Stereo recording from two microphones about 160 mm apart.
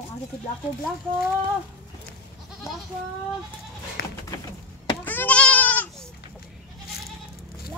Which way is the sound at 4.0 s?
80° left.